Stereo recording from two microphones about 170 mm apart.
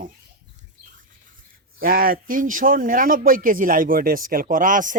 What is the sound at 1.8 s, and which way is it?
Speech, 60° right (ahead or behind).